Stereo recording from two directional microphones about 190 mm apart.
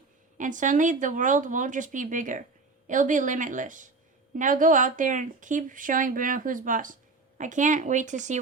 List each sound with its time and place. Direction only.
0.3 s speech: 40° right (ahead or behind)